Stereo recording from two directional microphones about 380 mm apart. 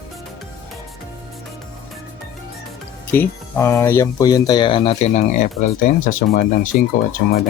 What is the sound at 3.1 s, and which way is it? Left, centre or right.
Speech, centre.